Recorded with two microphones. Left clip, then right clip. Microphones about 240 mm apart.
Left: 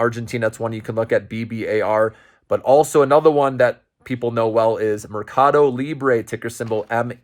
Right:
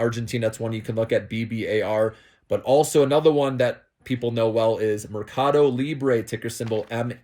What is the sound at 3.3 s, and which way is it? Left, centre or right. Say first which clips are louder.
Speech: left 5 dB; left.